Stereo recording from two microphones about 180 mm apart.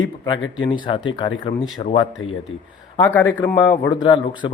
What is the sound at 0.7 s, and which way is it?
A man's voice, 30° left (ahead or behind).